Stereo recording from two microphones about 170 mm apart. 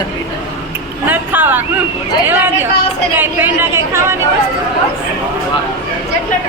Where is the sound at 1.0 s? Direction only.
10° right (ahead or behind).